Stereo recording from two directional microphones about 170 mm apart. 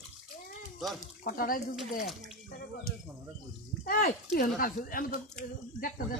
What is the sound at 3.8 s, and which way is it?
Speech, 55° left (ahead or behind).